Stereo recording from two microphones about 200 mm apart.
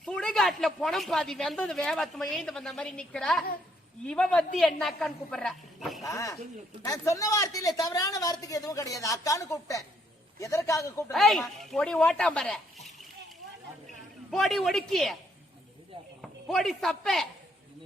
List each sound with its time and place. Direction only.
0.0 s a man's voice: 5° left (ahead or behind)
6.1 s a woman's voice: 15° left (ahead or behind)
11.1 s a man's voice: centre (ahead or behind)
14.3 s a man's voice: centre (ahead or behind)
16.5 s a man's voice: centre (ahead or behind)